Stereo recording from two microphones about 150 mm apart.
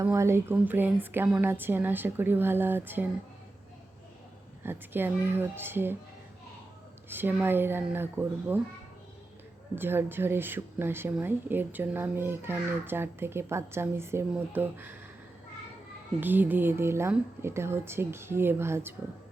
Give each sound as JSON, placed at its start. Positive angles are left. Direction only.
{"t": 0.0, "sound": "speech", "side_deg": -15}
{"t": 4.6, "sound": "speech", "side_deg": -15}
{"t": 7.1, "sound": "speech", "side_deg": -15}
{"t": 9.7, "sound": "speech", "side_deg": -15}
{"t": 16.2, "sound": "speech", "side_deg": -10}